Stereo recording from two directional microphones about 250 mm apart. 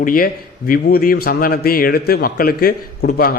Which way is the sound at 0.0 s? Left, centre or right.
Left.